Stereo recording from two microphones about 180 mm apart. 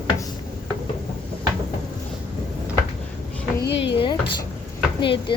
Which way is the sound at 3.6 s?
75° left (ahead or behind).